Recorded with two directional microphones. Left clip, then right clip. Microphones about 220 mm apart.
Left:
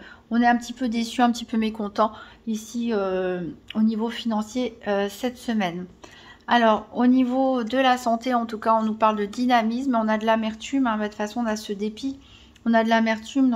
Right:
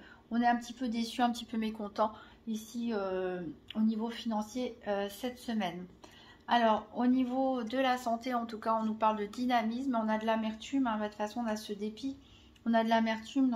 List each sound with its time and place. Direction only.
0.3 s speech: 35° left (ahead or behind)